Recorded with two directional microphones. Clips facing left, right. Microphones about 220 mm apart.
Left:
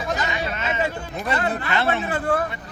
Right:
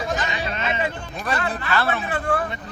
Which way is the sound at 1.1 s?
20° left (ahead or behind).